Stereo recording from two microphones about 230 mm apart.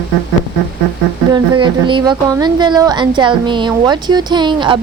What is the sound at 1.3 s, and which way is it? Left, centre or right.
Speech, right.